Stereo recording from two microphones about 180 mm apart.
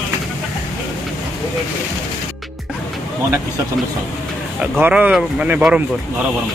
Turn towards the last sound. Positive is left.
turn(degrees=-5)  # may be behind; listen again after turning